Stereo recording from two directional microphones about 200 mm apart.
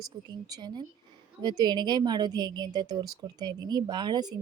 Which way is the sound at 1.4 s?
20° right (ahead or behind).